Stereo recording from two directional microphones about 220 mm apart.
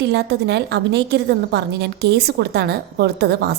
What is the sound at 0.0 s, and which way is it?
A woman's voice, 50° right (ahead or behind).